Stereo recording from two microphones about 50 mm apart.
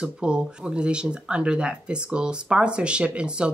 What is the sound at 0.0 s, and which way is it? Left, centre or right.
Speech, centre.